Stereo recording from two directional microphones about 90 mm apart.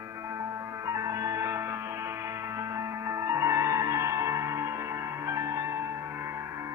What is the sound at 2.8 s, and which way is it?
Music, 30° right (ahead or behind).